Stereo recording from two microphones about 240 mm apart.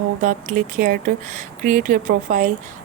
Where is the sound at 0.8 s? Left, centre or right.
Right.